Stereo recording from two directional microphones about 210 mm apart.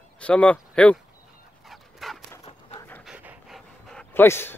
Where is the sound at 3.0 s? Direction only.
5° right (ahead or behind).